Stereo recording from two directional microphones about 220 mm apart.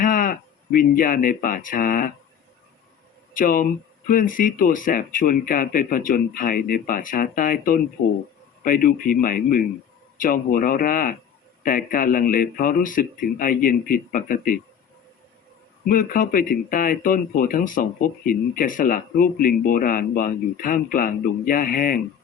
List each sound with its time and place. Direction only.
0.0 s speech: 40° left (ahead or behind)
3.3 s speech: 40° left (ahead or behind)
15.9 s speech: 40° left (ahead or behind)